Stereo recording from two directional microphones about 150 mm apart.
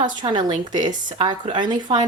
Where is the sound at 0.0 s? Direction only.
30° right (ahead or behind).